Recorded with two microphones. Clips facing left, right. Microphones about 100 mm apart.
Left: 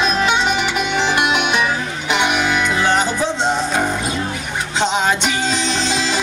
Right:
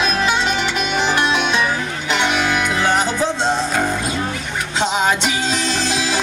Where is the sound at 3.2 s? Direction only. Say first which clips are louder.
Even; 20° left (ahead or behind).